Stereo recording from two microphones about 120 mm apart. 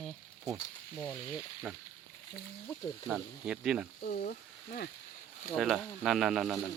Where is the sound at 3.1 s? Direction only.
5° right (ahead or behind).